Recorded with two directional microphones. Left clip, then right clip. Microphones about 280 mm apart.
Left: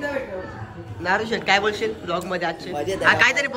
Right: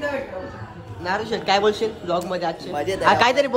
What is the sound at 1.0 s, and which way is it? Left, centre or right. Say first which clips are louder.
Speech: left 1 dB; centre.